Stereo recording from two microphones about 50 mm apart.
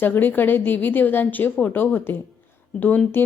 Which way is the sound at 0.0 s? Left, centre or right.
Left.